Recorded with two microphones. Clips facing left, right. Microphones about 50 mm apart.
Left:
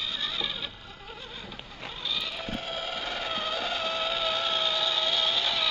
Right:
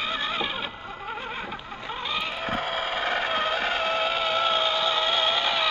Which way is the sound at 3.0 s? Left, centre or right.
Right.